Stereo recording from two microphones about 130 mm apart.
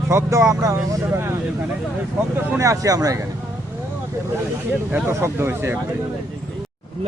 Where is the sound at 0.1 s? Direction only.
20° right (ahead or behind).